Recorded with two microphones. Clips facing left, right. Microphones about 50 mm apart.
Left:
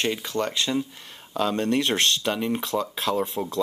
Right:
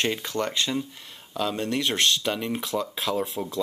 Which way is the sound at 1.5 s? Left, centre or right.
Left.